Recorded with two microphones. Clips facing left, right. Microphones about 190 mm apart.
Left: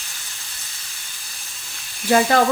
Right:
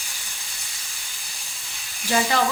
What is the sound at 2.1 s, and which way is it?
Frying, 55° left (ahead or behind).